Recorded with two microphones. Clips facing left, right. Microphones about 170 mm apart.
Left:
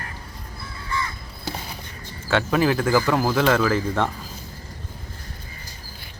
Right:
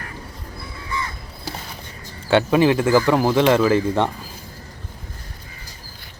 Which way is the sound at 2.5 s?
20° right (ahead or behind).